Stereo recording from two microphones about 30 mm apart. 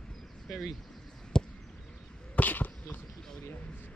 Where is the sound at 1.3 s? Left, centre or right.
Left.